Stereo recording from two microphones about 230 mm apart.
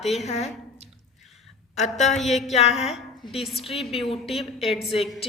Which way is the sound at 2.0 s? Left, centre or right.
Centre.